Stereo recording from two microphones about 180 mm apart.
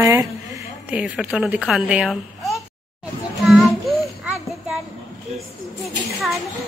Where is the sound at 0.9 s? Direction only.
5° right (ahead or behind).